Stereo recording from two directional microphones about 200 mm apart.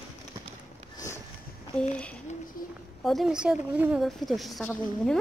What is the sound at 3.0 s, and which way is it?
Speech, centre (ahead or behind).